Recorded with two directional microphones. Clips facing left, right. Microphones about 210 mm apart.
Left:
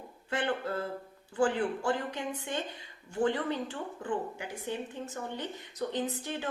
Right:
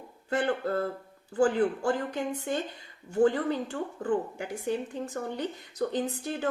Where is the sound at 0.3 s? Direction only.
40° right (ahead or behind).